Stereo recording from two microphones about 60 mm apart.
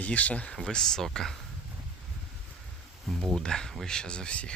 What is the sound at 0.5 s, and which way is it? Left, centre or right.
Speech, centre.